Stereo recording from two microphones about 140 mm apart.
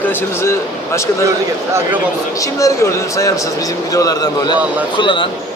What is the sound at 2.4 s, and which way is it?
A man's voice, 25° left (ahead or behind).